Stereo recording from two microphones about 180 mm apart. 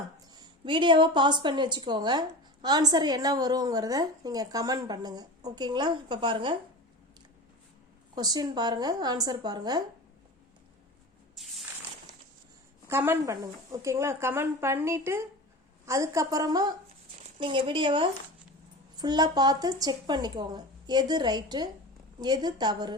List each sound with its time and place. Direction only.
0.3 s a woman's voice: 25° right (ahead or behind)
8.1 s a woman's voice: 20° right (ahead or behind)
12.9 s a woman's voice: 10° right (ahead or behind)